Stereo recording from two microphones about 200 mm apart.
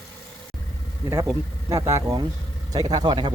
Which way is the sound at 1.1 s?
15° right (ahead or behind).